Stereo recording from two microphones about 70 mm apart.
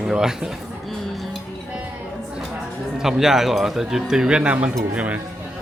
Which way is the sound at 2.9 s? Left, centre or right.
Centre.